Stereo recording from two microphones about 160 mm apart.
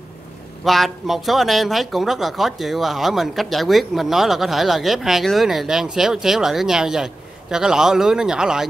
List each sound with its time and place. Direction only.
0.7 s speech: centre (ahead or behind)